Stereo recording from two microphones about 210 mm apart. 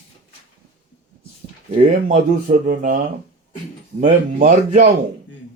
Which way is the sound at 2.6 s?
40° right (ahead or behind).